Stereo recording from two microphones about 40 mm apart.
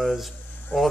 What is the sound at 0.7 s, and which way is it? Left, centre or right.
Speech, left.